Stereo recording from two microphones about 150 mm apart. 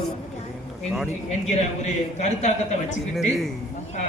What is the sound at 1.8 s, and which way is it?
Speech, 50° left (ahead or behind).